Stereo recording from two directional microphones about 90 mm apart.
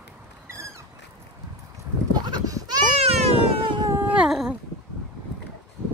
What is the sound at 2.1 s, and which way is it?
Goat, 45° right (ahead or behind).